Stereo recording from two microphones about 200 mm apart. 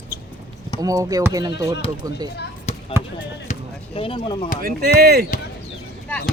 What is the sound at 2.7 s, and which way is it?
Basketball bounce, 30° left (ahead or behind).